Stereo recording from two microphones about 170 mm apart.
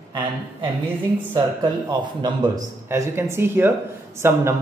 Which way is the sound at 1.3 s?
25° right (ahead or behind).